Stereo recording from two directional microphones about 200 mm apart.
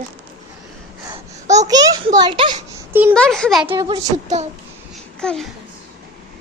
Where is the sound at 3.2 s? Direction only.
5° left (ahead or behind).